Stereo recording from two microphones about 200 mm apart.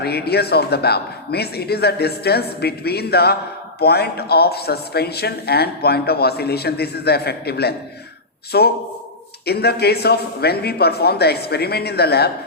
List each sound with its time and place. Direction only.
0.0 s a man's voice: 55° left (ahead or behind)